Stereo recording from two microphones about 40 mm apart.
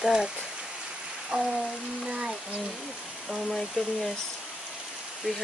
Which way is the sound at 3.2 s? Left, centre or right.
Centre.